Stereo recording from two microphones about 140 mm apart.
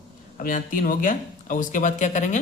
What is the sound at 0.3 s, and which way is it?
Speech, 75° left (ahead or behind).